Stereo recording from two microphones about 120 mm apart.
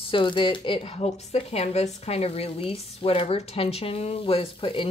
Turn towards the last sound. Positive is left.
turn(degrees=50)  # may be behind; listen again after turning